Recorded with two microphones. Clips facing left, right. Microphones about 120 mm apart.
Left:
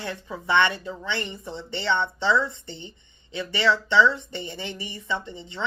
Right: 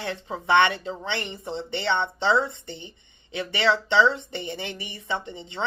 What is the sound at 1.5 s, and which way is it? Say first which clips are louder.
Speech: right 6 dB; 60° right (ahead or behind).